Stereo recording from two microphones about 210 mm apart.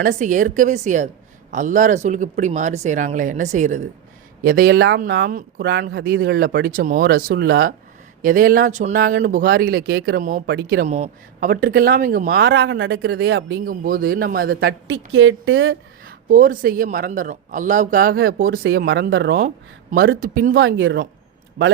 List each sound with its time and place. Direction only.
0.0 s a woman's voice: 40° right (ahead or behind)
10.4 s speech: 55° right (ahead or behind)
10.8 s speech: 35° right (ahead or behind)
12.5 s speech: 55° right (ahead or behind)
14.8 s a woman's voice: 65° right (ahead or behind)
16.0 s a woman's voice: 40° right (ahead or behind)
18.4 s a woman's voice: 65° right (ahead or behind)
18.8 s speech: 50° right (ahead or behind)
19.9 s speech: 40° right (ahead or behind)
20.7 s a woman's voice: 60° right (ahead or behind)